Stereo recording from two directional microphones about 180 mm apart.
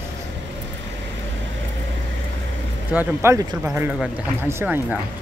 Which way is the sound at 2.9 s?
15° right (ahead or behind).